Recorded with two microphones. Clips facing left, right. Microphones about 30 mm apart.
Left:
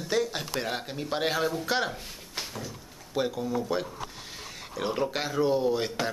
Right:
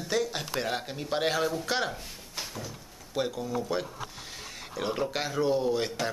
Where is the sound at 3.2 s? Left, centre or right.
Centre.